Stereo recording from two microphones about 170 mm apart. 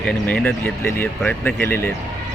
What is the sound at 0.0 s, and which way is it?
Speech, 5° left (ahead or behind).